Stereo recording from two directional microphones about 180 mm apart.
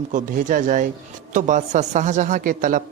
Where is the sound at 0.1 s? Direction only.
45° right (ahead or behind).